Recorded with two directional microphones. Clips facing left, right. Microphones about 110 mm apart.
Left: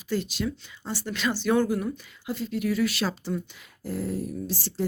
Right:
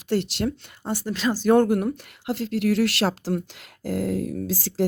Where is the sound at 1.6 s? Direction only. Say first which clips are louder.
Right 5 dB; 65° right (ahead or behind).